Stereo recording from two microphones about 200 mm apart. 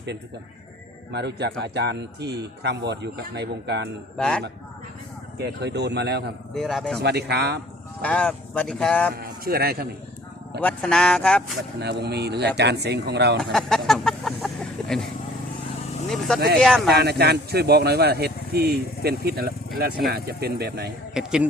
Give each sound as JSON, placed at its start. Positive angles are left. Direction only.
{"t": 1.1, "sound": "speech", "side_deg": -55}
{"t": 4.2, "sound": "speech", "side_deg": 5}
{"t": 5.4, "sound": "speech", "side_deg": -55}
{"t": 6.5, "sound": "speech", "side_deg": 0}
{"t": 7.0, "sound": "speech", "side_deg": -55}
{"t": 8.0, "sound": "speech", "side_deg": 5}
{"t": 9.1, "sound": "speech", "side_deg": -50}
{"t": 10.6, "sound": "speech", "side_deg": 5}
{"t": 11.8, "sound": "speech", "side_deg": -55}
{"t": 13.4, "sound": "chicken", "side_deg": 0}
{"t": 16.0, "sound": "vehicle", "side_deg": 0}
{"t": 16.6, "sound": "speech", "side_deg": 0}
{"t": 16.9, "sound": "speech", "side_deg": -55}
{"t": 21.1, "sound": "speech", "side_deg": -5}